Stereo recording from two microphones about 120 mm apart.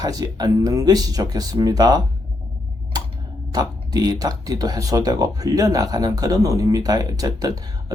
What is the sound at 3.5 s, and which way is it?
Speech, 35° right (ahead or behind).